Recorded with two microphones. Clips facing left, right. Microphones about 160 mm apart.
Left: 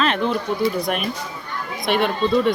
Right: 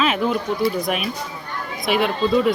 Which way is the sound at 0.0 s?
5° right (ahead or behind).